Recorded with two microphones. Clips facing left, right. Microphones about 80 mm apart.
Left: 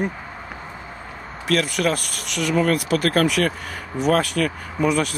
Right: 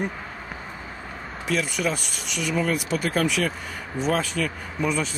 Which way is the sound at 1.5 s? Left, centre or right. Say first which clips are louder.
Left 5 dB; left.